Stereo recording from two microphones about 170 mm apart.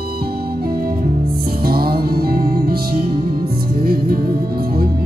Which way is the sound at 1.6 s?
65° right (ahead or behind).